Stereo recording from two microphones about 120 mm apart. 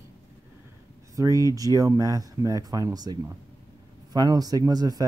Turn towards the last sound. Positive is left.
turn(degrees=-30)  # may be behind; listen again after turning